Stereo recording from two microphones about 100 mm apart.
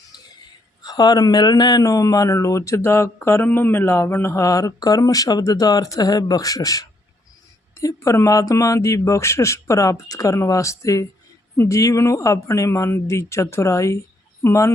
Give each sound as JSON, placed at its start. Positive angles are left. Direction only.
{"t": 0.8, "sound": "speech", "side_deg": 45}